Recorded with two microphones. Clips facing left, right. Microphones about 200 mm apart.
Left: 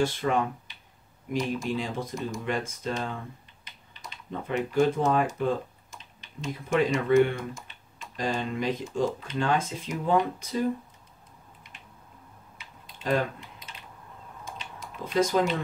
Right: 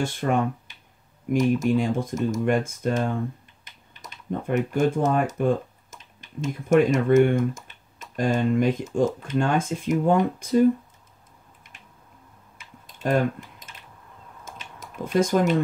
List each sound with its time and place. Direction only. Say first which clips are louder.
0.0 s speech: right 2 dB; 50° right (ahead or behind)
12.5 s typing: right 3 dB; 45° right (ahead or behind)